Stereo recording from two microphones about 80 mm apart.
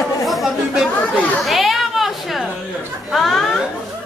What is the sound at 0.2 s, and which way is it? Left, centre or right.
Chatter, centre.